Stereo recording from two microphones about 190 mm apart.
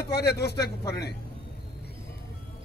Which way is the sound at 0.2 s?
60° left (ahead or behind).